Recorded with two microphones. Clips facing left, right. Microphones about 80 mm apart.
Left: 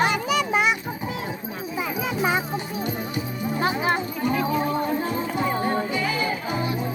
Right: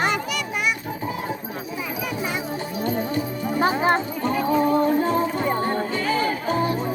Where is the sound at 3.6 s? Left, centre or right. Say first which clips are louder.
Right 4 dB; right.